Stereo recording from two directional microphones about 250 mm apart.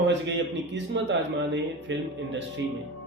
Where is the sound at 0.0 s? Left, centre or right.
Right.